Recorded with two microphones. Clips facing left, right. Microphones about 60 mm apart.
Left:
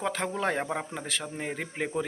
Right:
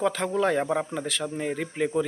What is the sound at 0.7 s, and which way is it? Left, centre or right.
Speech, centre.